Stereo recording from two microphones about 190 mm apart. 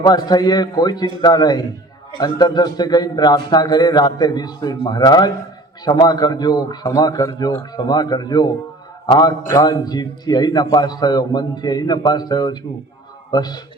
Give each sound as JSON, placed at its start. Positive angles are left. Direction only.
{"t": 0.0, "sound": "a man's voice", "side_deg": 20}